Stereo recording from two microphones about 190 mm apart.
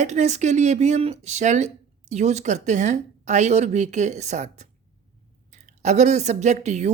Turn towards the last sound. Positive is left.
turn(degrees=-35)  # may be behind; listen again after turning